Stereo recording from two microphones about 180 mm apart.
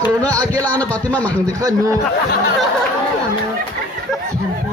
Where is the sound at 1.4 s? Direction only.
20° right (ahead or behind).